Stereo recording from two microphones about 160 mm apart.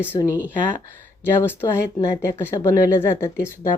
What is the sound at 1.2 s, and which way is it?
Speech, 15° left (ahead or behind).